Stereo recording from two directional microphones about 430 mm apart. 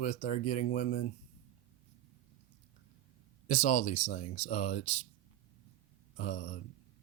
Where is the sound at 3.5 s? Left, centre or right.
Centre.